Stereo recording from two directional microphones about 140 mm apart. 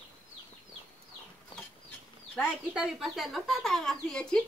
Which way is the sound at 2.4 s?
5° right (ahead or behind).